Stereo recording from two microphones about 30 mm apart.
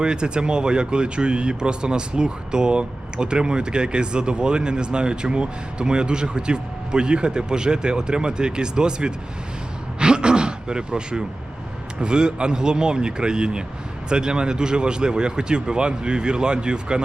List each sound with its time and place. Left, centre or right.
0.0 s speech: right
10.0 s a sound: right
11.9 s speech: right